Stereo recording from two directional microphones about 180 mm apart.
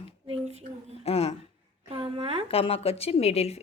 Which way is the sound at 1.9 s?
25° right (ahead or behind).